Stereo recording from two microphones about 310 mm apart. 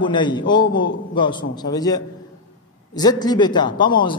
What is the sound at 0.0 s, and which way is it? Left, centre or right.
A woman's voice, centre.